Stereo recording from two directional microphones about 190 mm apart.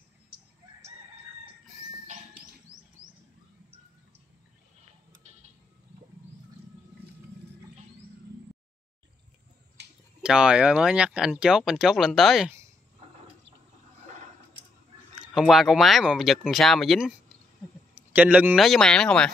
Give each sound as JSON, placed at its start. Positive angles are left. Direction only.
{"t": 9.8, "sound": "a sound", "side_deg": -60}
{"t": 10.2, "sound": "speech", "side_deg": -5}
{"t": 15.3, "sound": "speech", "side_deg": 0}
{"t": 18.1, "sound": "speech", "side_deg": -10}